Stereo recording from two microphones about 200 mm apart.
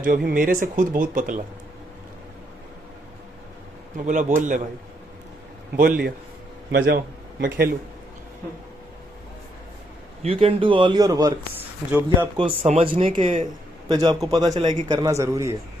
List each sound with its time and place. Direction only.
0.3 s speech: 45° right (ahead or behind)
3.9 s a man's voice: 40° right (ahead or behind)
5.7 s speech: 45° right (ahead or behind)
6.7 s a man's voice: 60° right (ahead or behind)
10.2 s a man's voice: 25° right (ahead or behind); by 12.3 s 10° right (ahead or behind)
12.4 s speech: 30° right (ahead or behind)
14.5 s a man's voice: 35° right (ahead or behind)
14.8 s a man's voice: 20° right (ahead or behind)